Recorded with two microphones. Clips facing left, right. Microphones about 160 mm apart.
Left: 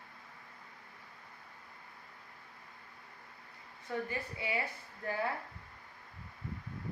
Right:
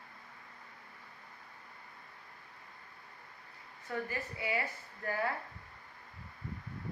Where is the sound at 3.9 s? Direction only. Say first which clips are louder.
Left 1 dB; 20° left (ahead or behind).